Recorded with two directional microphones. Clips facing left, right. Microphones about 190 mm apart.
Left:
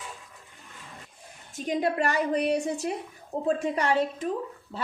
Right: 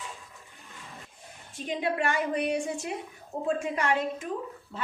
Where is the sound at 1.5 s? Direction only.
40° left (ahead or behind).